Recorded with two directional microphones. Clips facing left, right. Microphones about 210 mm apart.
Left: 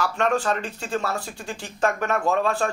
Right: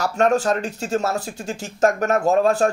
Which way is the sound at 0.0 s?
40° right (ahead or behind).